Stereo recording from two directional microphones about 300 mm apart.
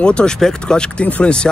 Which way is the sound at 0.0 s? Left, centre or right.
Centre.